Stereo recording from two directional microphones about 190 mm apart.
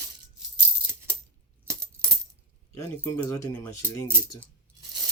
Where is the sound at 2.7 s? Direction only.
15° left (ahead or behind).